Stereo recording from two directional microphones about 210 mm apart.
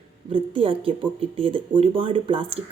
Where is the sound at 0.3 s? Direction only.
25° right (ahead or behind).